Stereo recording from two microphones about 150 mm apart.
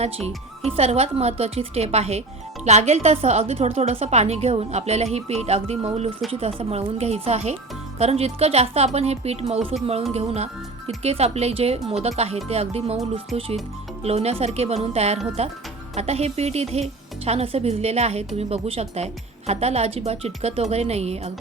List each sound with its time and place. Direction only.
0.8 s a woman's voice: 45° right (ahead or behind)